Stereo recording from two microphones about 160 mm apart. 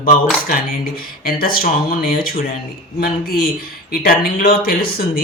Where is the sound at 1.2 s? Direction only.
65° left (ahead or behind).